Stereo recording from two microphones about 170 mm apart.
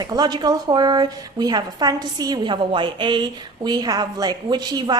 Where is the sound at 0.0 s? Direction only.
25° right (ahead or behind).